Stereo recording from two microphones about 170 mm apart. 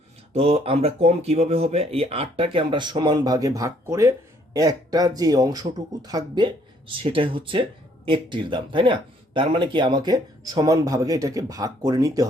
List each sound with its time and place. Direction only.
0.3 s speech: 35° right (ahead or behind); by 12.3 s 20° right (ahead or behind)